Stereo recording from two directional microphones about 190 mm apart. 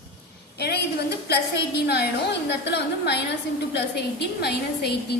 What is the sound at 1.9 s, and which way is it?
A woman's voice, 60° left (ahead or behind).